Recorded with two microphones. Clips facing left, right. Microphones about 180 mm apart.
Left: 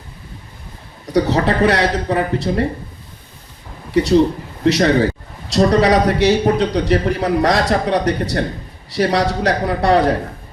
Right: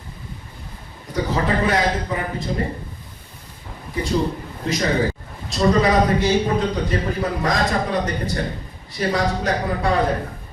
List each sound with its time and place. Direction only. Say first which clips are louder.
1.1 s a man's voice: left 6 dB; 75° left (ahead or behind)
3.9 s a man's voice: left 9 dB; 75° left (ahead or behind)